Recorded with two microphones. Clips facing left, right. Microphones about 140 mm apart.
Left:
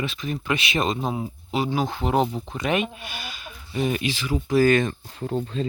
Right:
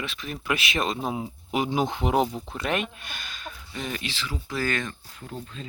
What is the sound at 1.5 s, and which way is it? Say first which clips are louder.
Speech: left 1 dB; 15° right (ahead or behind).